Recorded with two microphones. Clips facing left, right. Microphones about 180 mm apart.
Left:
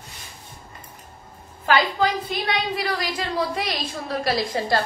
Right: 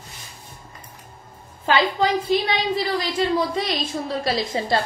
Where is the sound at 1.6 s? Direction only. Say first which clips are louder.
Right 1 dB; 25° right (ahead or behind).